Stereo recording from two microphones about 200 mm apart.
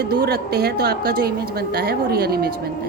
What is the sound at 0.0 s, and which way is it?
A woman's voice, 50° right (ahead or behind).